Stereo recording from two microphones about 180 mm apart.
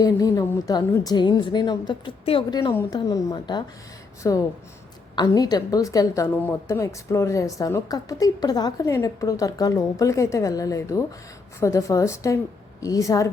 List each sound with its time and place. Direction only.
0.0 s a woman's voice: 20° left (ahead or behind)